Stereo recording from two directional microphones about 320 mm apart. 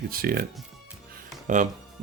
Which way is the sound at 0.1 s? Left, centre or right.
Right.